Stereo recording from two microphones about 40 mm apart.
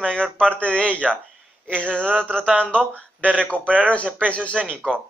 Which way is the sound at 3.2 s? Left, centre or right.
Right.